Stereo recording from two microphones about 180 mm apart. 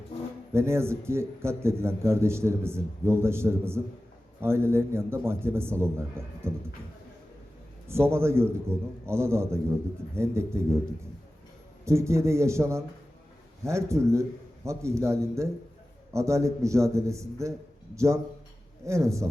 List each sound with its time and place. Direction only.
0.5 s a man's voice: 15° right (ahead or behind)
7.9 s a man's voice: 15° right (ahead or behind)
11.9 s a man's voice: 15° right (ahead or behind)